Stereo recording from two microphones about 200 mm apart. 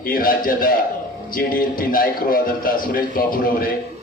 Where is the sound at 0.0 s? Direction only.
45° left (ahead or behind).